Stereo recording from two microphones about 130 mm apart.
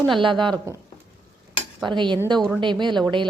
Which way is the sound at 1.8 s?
35° right (ahead or behind).